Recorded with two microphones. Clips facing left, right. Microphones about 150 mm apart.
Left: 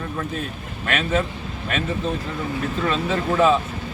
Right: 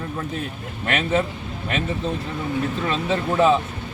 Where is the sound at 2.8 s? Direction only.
20° right (ahead or behind).